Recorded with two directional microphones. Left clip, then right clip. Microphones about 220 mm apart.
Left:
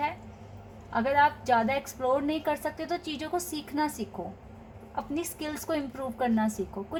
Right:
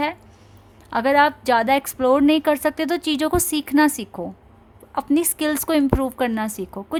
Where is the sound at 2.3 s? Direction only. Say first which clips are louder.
Right 11 dB; 40° right (ahead or behind).